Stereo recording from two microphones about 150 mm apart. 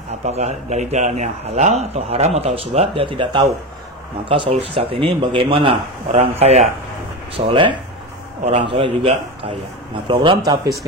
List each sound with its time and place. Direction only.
0.2 s a man's voice: 45° right (ahead or behind); by 10.7 s 30° right (ahead or behind)